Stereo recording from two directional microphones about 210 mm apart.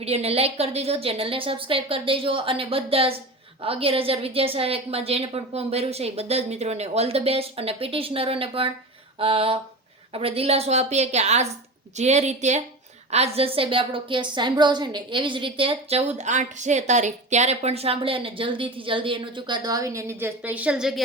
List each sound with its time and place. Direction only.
0.0 s a woman's voice: 30° right (ahead or behind); by 21.0 s centre (ahead or behind)